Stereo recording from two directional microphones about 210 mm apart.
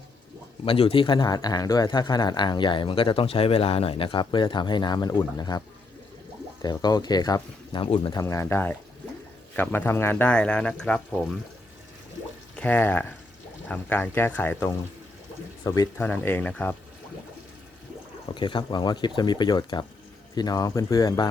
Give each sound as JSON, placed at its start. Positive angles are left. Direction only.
{"t": 0.6, "sound": "speech", "side_deg": 25}
{"t": 12.5, "sound": "speech", "side_deg": 5}
{"t": 18.3, "sound": "speech", "side_deg": 25}